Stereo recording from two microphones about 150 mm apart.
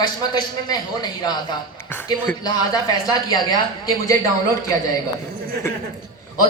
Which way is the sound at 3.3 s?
25° left (ahead or behind).